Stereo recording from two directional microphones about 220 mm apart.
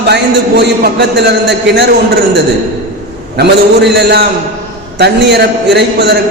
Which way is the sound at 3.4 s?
50° right (ahead or behind).